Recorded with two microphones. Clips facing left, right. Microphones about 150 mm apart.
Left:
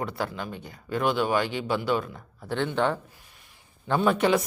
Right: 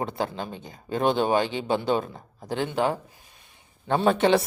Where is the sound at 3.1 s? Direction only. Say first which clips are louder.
Even; 20° right (ahead or behind).